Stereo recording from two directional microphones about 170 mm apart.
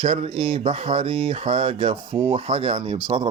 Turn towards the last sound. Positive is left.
turn(degrees=-35)  # may be behind; listen again after turning